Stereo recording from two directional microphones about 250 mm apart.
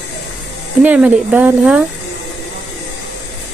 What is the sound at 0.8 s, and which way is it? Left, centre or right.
Speech, centre.